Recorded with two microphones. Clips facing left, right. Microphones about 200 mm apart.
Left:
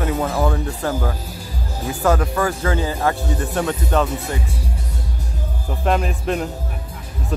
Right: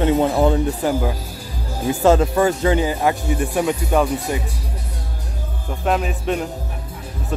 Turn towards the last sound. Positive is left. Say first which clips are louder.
# even
turn(degrees=0)  # may be behind; listen again after turning